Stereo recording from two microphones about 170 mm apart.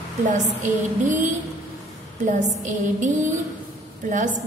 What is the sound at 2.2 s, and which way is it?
A woman's voice, 50° right (ahead or behind).